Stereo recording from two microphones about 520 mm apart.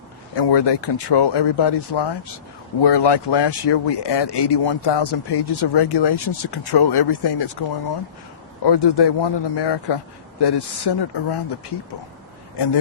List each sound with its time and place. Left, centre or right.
0.3 s speech: left
8.6 s speech: left
12.5 s speech: left